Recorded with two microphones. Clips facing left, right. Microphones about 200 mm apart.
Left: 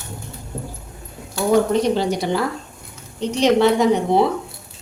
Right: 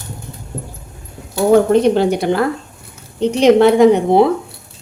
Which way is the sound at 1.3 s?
55° right (ahead or behind).